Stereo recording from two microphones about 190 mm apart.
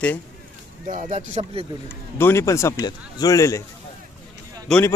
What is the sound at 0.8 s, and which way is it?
Speech, 40° right (ahead or behind).